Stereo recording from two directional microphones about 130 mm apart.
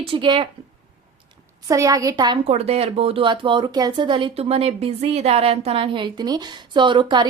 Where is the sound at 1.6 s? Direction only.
25° right (ahead or behind).